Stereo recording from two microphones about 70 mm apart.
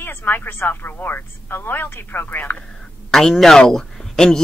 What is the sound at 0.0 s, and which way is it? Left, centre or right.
Speech, left.